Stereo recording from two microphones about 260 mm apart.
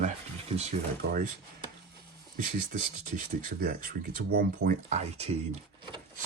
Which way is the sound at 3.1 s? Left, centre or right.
Right.